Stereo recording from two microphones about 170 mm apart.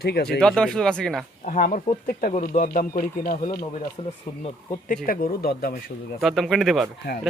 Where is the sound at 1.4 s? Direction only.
50° left (ahead or behind).